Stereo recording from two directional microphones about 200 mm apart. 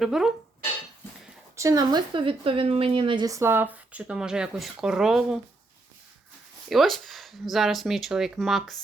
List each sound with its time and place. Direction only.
0.0 s speech: centre (ahead or behind)
1.5 s a woman's voice: 15° right (ahead or behind); by 5.4 s centre (ahead or behind)
6.7 s speech: centre (ahead or behind)